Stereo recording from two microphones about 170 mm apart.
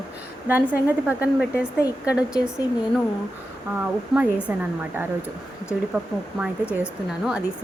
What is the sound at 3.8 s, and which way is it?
A woman's voice, 10° right (ahead or behind).